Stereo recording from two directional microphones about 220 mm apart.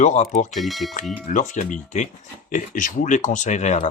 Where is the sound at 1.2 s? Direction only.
35° left (ahead or behind).